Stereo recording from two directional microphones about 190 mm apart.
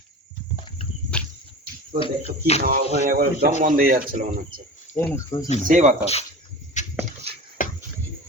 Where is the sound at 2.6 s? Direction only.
50° right (ahead or behind).